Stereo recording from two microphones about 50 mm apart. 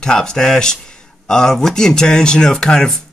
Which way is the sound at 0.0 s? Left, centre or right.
Centre.